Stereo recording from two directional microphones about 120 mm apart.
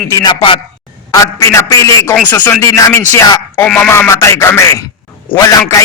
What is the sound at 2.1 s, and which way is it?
Speech, 10° left (ahead or behind).